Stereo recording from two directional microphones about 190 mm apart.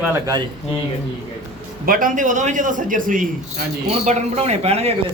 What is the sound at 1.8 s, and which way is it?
A man's voice, 45° right (ahead or behind).